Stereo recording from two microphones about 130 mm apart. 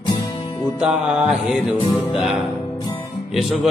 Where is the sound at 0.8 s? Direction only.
5° right (ahead or behind).